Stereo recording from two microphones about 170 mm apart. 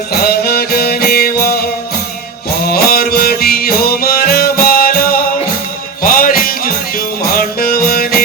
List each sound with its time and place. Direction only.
0.1 s music: 65° left (ahead or behind)
2.6 s music: 60° left (ahead or behind)